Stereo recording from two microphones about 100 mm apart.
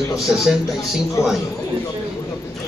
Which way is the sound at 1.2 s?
35° left (ahead or behind).